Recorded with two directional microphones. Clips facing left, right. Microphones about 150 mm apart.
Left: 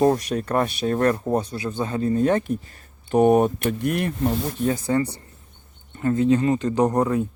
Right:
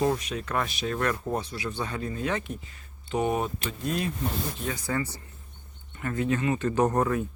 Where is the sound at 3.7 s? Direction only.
65° left (ahead or behind).